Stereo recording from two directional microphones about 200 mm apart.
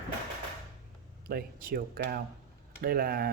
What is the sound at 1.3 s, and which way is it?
Speech, 45° right (ahead or behind).